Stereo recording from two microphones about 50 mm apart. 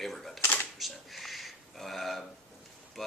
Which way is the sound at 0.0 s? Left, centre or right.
Centre.